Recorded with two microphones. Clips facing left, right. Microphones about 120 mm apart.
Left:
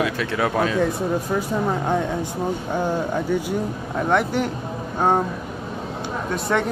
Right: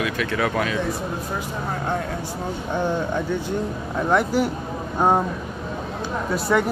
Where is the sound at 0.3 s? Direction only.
25° left (ahead or behind).